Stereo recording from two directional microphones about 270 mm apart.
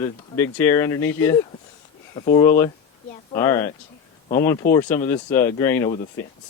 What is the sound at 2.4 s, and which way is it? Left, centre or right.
A woman's voice, centre.